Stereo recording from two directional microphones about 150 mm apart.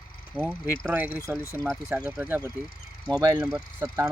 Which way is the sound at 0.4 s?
5° right (ahead or behind).